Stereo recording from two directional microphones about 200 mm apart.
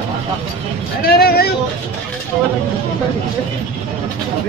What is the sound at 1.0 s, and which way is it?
Vehicle, 50° left (ahead or behind).